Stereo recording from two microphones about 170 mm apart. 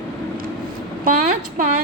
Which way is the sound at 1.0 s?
55° right (ahead or behind).